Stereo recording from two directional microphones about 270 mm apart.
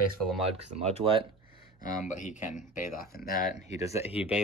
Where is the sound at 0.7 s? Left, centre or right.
Right.